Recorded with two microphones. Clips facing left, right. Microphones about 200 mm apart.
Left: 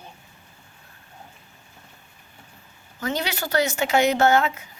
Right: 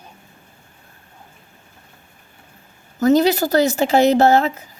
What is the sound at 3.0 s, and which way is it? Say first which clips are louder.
Speech: right 13 dB; 40° right (ahead or behind).